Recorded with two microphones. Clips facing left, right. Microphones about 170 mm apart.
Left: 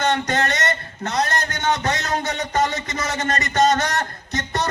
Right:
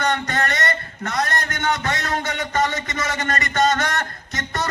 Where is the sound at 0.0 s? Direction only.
25° left (ahead or behind).